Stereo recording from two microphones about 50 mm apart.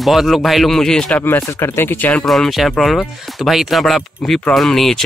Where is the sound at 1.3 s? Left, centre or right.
Left.